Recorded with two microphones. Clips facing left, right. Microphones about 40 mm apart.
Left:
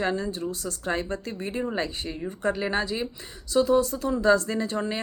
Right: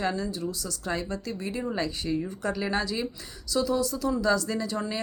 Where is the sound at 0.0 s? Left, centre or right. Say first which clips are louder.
Left 2 dB; left.